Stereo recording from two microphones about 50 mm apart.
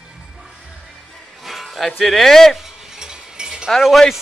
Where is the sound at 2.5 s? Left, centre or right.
Centre.